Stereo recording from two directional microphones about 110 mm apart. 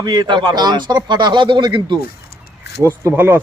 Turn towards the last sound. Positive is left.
turn(degrees=-20)  # may be behind; listen again after turning